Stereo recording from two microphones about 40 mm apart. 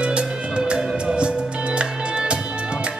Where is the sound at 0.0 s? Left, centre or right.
Right.